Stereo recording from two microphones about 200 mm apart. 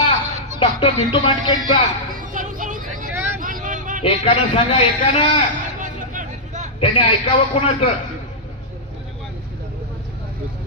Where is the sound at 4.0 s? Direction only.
30° left (ahead or behind).